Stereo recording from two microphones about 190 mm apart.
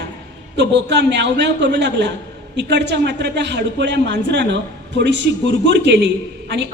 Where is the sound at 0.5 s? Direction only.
65° right (ahead or behind).